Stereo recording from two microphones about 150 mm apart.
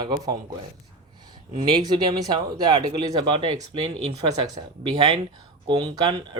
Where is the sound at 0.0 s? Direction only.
25° right (ahead or behind).